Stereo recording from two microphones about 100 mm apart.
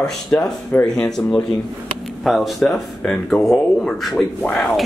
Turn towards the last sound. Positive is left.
turn(degrees=15)  # may be behind; listen again after turning